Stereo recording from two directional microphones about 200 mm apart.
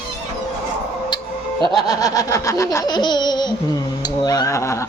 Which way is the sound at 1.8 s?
20° left (ahead or behind).